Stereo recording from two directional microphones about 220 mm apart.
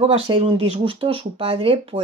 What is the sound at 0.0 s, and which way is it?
Speech, 25° right (ahead or behind).